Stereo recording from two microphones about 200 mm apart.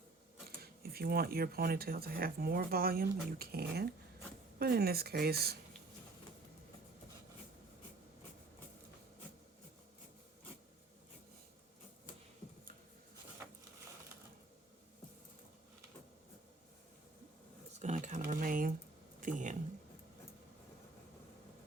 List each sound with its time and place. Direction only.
0.4 s speech: 50° right (ahead or behind)
17.7 s typing: 35° right (ahead or behind)
19.2 s a sound: 40° right (ahead or behind)